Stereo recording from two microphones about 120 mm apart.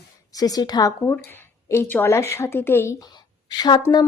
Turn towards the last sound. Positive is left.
turn(degrees=40)  # may be behind; listen again after turning